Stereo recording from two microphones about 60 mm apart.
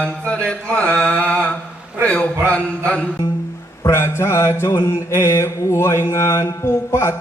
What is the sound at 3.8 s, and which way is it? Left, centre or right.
Mantra, left.